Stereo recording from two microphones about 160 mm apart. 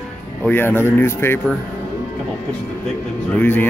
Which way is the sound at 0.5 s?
15° left (ahead or behind).